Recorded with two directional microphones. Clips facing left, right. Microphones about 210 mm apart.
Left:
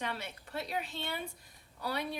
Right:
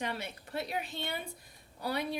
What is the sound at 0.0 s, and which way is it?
A woman's voice, 15° right (ahead or behind).